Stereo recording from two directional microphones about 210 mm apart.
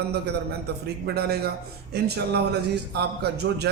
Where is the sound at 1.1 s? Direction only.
50° right (ahead or behind).